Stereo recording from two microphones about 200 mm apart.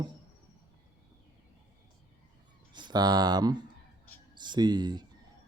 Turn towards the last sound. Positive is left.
turn(degrees=-20)  # may be behind; listen again after turning